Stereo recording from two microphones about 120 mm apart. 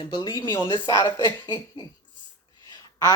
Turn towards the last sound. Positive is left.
turn(degrees=30)  # may be behind; listen again after turning